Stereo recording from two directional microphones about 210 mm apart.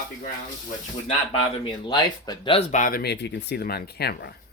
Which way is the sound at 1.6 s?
20° left (ahead or behind).